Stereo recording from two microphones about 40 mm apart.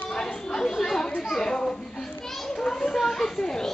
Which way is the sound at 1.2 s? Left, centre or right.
Centre.